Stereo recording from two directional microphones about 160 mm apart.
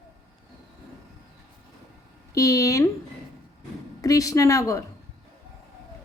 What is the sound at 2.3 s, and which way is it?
Speech, 20° left (ahead or behind).